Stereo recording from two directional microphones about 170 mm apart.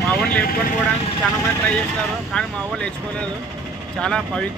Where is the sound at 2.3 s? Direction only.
5° left (ahead or behind).